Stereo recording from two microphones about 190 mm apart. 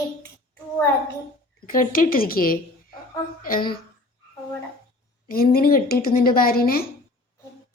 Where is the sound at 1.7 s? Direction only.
45° left (ahead or behind).